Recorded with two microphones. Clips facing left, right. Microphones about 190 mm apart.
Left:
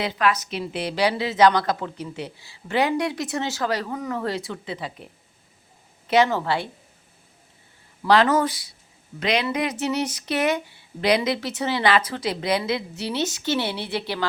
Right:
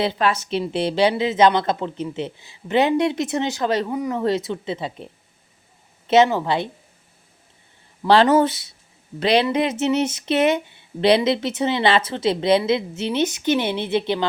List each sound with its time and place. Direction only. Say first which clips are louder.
0.0 s speech: right 2 dB; 30° right (ahead or behind)
6.1 s speech: right 4 dB; 20° right (ahead or behind)
8.0 s speech: right 4 dB; 30° right (ahead or behind)